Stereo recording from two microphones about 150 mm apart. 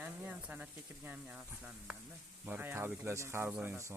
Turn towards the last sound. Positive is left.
turn(degrees=-15)  # may be behind; listen again after turning